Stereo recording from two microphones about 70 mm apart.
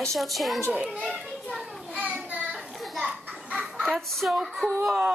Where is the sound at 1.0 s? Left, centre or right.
Centre.